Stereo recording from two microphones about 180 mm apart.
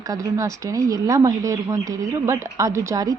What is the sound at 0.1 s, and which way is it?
A woman's voice, 20° right (ahead or behind).